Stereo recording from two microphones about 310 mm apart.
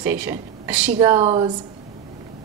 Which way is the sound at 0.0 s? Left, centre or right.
Centre.